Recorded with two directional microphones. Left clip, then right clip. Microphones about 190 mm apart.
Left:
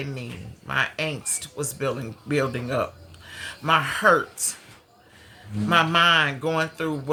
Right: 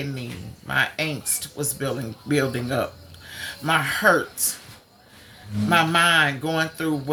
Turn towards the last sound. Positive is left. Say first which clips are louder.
# right 1 dB
turn(degrees=15)  # may be behind; listen again after turning